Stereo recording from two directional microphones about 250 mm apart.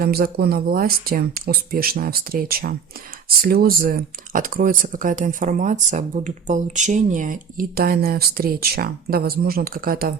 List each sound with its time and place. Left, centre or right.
0.0 s speech: right